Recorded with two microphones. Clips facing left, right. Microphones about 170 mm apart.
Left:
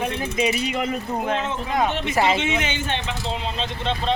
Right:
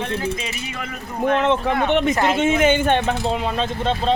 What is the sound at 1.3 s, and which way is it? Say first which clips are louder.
Speech: right 12 dB; 65° right (ahead or behind).